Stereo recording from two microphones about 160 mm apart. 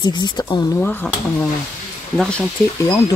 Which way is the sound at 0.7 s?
5° left (ahead or behind).